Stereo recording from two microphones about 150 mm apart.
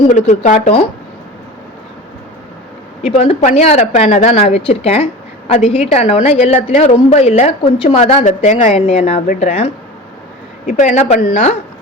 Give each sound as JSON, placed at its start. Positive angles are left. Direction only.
{"t": 0.1, "sound": "speech", "side_deg": 55}
{"t": 3.0, "sound": "speech", "side_deg": 40}
{"t": 10.7, "sound": "speech", "side_deg": 55}